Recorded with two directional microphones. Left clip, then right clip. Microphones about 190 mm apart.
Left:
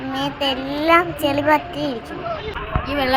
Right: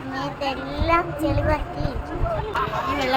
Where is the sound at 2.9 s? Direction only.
45° left (ahead or behind).